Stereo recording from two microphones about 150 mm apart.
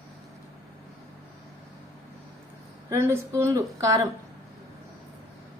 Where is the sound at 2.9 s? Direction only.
15° right (ahead or behind).